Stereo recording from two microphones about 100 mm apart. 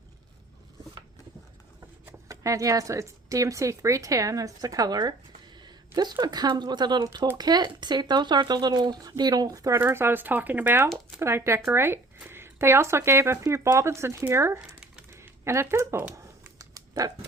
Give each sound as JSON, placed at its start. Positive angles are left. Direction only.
{"t": 2.2, "sound": "speech", "side_deg": -35}
{"t": 15.1, "sound": "a sound", "side_deg": -25}
{"t": 16.6, "sound": "typing", "side_deg": -35}